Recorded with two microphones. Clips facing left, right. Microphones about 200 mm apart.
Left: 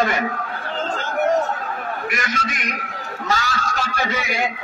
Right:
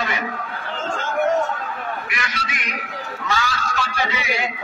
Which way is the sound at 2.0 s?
45° left (ahead or behind).